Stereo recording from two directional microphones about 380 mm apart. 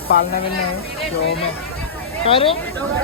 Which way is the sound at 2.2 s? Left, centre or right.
Centre.